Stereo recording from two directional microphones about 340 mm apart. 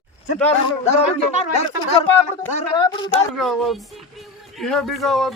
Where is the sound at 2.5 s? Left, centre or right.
Centre.